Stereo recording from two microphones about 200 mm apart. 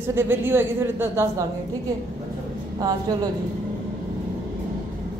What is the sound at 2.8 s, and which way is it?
Speech, 20° right (ahead or behind).